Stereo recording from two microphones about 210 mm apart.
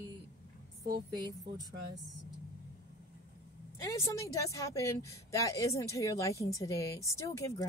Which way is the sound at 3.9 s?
15° left (ahead or behind).